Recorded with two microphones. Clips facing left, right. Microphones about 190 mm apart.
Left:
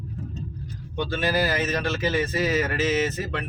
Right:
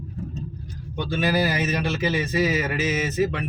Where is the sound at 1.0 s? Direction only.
10° right (ahead or behind).